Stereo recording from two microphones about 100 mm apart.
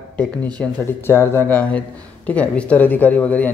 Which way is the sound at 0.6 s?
25° left (ahead or behind).